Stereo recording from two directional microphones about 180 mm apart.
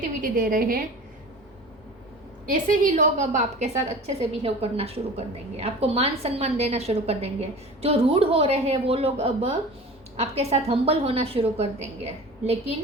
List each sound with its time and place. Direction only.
0.0 s a woman's voice: 50° right (ahead or behind)
2.5 s a woman's voice: 45° right (ahead or behind)